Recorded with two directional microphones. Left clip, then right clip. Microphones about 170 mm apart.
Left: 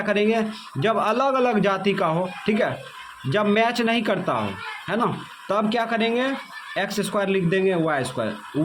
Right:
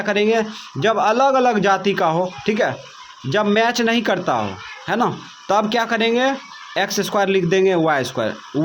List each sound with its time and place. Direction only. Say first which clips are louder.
0.0 s a man's voice: right 4 dB; 25° right (ahead or behind)